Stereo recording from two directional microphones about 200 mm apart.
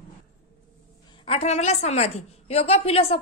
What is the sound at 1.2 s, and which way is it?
A child's voice, 30° left (ahead or behind).